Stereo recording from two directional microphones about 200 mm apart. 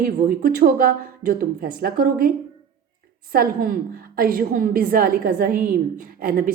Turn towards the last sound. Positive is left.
turn(degrees=-45)  # may be behind; listen again after turning